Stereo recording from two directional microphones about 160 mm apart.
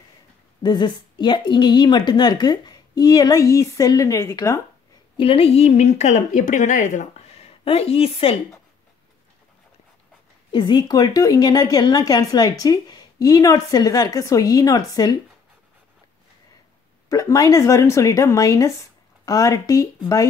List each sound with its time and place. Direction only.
0.6 s a woman's voice: 30° left (ahead or behind)
5.1 s speech: 35° left (ahead or behind)
10.5 s a woman's voice: 25° left (ahead or behind)
17.1 s a woman's voice: 20° left (ahead or behind)